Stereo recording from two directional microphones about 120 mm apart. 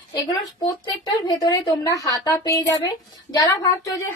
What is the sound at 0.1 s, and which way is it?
A woman's voice, 35° left (ahead or behind).